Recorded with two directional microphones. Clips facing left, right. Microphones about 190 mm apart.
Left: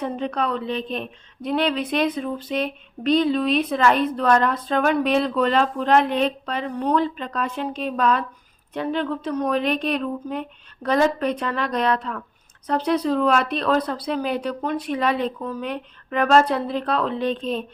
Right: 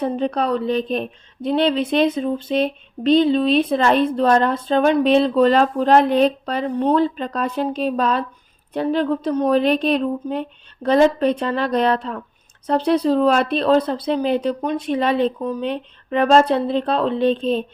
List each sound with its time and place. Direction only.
0.0 s a woman's voice: 35° right (ahead or behind)